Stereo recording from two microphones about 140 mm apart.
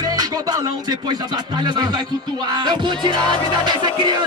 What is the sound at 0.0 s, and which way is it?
Music, 30° right (ahead or behind).